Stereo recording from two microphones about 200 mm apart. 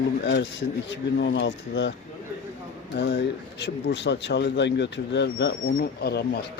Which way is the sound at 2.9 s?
65° left (ahead or behind).